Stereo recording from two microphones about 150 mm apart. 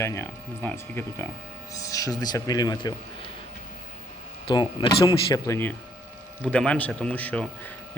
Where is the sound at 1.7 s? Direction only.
25° left (ahead or behind).